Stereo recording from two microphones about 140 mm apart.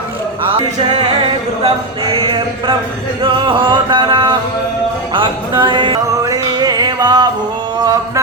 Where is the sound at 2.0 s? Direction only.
35° right (ahead or behind).